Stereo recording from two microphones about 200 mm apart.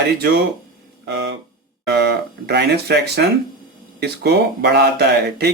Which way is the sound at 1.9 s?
55° right (ahead or behind).